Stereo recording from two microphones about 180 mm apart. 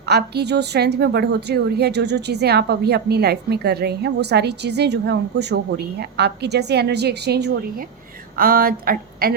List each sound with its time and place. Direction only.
0.0 s a woman's voice: 65° right (ahead or behind)
8.4 s speech: 55° right (ahead or behind)